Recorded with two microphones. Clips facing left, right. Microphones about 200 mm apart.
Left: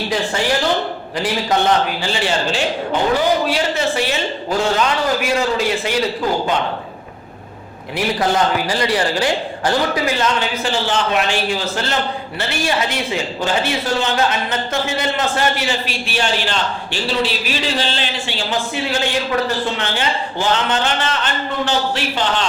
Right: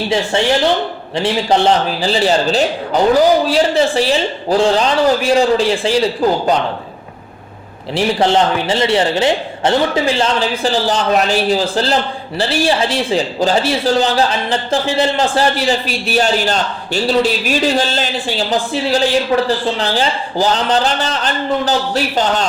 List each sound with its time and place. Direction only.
1.1 s a man's voice: 30° right (ahead or behind)
7.9 s a man's voice: 25° right (ahead or behind)